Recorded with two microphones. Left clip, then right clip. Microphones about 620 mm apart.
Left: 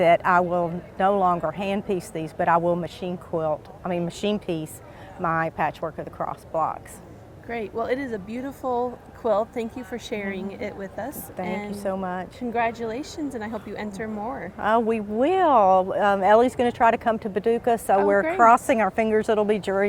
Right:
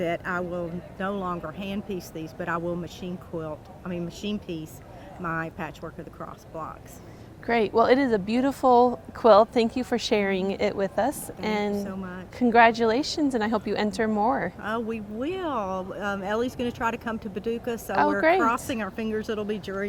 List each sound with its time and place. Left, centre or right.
0.0 s speech: left
7.4 s speech: right
11.8 s speech: left
12.4 s speech: right
14.6 s speech: left